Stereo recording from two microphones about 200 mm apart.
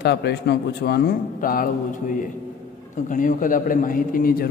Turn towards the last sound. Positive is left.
turn(degrees=45)  # may be behind; listen again after turning